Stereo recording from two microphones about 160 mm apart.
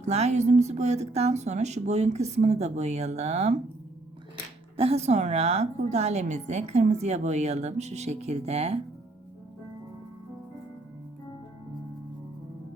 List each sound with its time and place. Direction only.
0.0 s a woman's voice: 45° right (ahead or behind)
4.8 s a woman's voice: 40° right (ahead or behind)